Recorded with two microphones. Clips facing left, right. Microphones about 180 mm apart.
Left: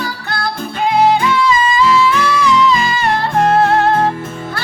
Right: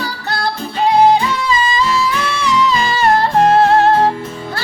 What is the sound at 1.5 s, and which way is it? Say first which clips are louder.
Music: left 3 dB; 35° right (ahead or behind).